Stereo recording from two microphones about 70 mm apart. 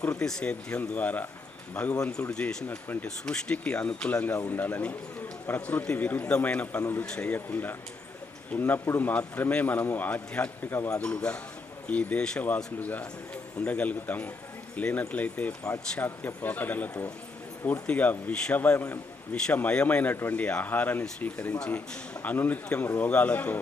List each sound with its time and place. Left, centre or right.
0.0 s a man's voice: left
0.8 s a man's voice: left
2.3 s speech: centre
2.6 s a man's voice: left
3.2 s a man's voice: centre
7.3 s a man's voice: left